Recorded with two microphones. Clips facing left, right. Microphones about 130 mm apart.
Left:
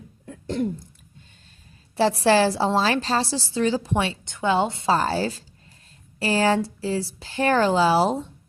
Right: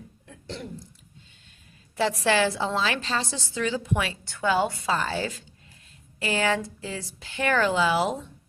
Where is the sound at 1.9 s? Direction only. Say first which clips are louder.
Left 5 dB; 35° left (ahead or behind).